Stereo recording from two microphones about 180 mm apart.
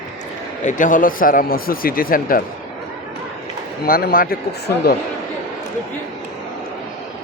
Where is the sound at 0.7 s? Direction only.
45° left (ahead or behind).